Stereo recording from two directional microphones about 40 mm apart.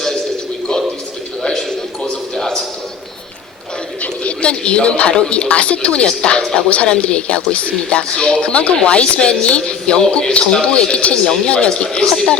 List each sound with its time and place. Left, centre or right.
1.4 s a sound: centre
4.0 s speech: left
12.0 s speech: centre